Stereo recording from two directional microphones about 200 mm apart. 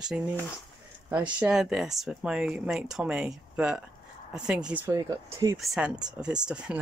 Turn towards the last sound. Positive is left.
turn(degrees=-5)  # may be behind; listen again after turning